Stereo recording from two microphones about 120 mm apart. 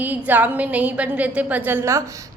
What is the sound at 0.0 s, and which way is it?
A woman's voice, 15° right (ahead or behind).